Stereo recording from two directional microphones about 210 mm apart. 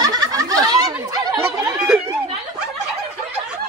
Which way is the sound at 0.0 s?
15° right (ahead or behind).